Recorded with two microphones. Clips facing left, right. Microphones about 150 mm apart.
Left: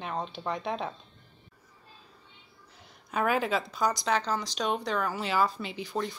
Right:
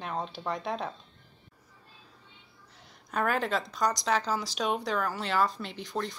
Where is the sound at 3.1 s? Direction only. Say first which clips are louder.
Left 1 dB; 5° left (ahead or behind).